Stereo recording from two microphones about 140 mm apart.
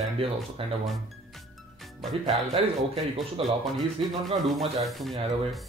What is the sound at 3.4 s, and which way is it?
Speech, 40° right (ahead or behind).